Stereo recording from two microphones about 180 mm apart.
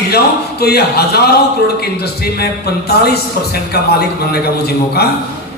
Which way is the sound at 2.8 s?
60° left (ahead or behind).